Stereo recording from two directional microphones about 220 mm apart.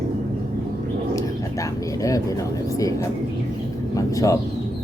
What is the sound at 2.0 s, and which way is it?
Speech, 15° left (ahead or behind).